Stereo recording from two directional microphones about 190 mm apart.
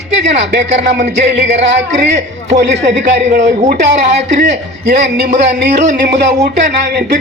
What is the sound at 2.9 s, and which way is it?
Speech, 65° right (ahead or behind).